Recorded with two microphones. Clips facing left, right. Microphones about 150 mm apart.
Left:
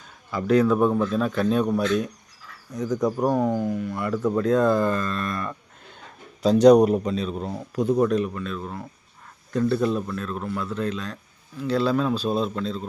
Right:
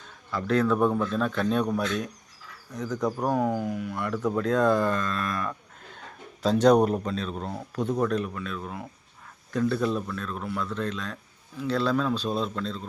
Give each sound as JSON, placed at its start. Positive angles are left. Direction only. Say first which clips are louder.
{"t": 0.3, "sound": "speech", "louder": "left 4 dB", "side_deg": 15}
{"t": 3.5, "sound": "speech", "louder": "left 4 dB", "side_deg": -5}